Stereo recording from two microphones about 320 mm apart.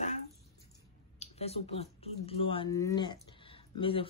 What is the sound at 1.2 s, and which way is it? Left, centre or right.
Speech, centre.